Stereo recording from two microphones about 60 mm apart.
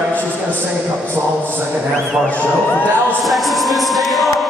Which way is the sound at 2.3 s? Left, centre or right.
Left.